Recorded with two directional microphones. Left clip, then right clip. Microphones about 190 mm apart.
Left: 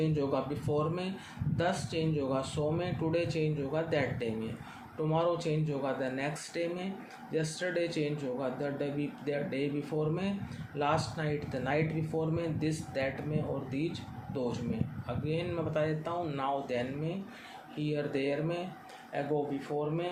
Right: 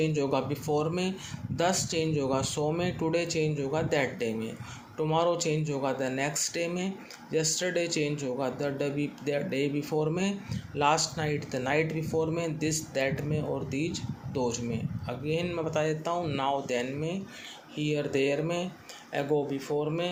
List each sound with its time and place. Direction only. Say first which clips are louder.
0.0 s speech: right 4 dB; 35° right (ahead or behind)